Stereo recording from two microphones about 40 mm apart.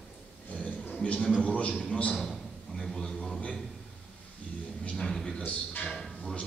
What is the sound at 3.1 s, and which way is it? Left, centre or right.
Speech, centre.